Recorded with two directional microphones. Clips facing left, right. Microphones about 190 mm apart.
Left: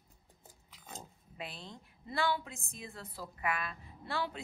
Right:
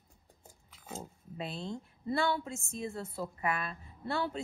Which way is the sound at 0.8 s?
Centre (ahead or behind).